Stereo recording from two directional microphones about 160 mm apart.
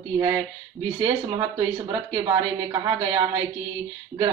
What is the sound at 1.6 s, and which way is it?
A woman's voice, 25° right (ahead or behind).